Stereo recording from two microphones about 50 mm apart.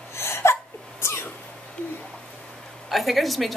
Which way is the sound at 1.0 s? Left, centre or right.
Left.